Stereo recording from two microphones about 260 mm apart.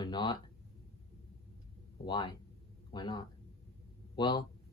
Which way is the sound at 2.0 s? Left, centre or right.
Centre.